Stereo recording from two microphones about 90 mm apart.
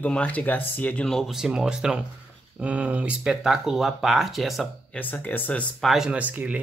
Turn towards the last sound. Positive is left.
turn(degrees=-15)  # may be behind; listen again after turning